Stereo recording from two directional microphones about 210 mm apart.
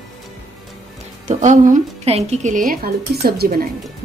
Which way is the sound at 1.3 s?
35° right (ahead or behind).